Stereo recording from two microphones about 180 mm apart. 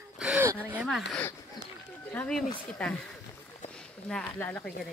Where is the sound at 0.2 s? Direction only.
5° right (ahead or behind).